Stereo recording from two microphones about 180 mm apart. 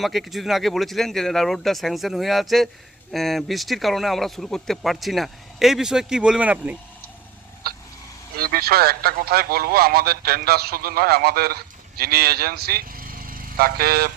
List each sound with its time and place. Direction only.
0.0 s speech: centre (ahead or behind)
7.6 s a sound: 60° right (ahead or behind)
8.4 s a man's voice: 55° right (ahead or behind)